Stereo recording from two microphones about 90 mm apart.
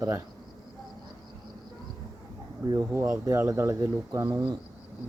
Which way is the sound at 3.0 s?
40° right (ahead or behind).